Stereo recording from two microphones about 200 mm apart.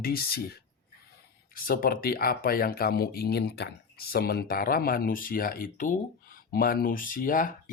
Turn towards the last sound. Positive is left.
turn(degrees=45)  # may be behind; listen again after turning